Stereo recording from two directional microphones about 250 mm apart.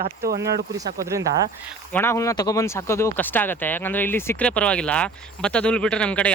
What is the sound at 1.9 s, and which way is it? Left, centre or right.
Speech, centre.